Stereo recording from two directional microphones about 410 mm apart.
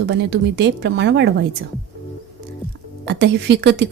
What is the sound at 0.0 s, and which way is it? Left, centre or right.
A woman's voice, right.